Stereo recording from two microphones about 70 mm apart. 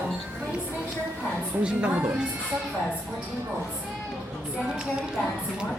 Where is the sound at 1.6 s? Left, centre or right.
Centre.